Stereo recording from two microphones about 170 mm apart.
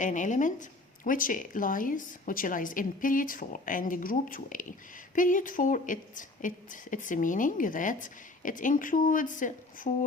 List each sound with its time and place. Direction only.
0.0 s a woman's voice: 45° left (ahead or behind)